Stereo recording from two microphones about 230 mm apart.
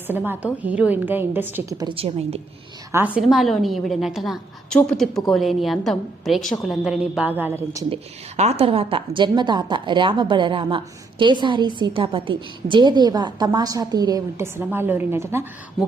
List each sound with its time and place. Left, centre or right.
0.1 s a woman's voice: centre
1.9 s a woman's voice: right
3.2 s a woman's voice: centre
8.4 s a woman's voice: right; by 15.4 s centre